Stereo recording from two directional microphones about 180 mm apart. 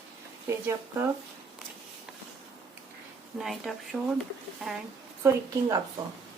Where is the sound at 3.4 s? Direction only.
Centre (ahead or behind).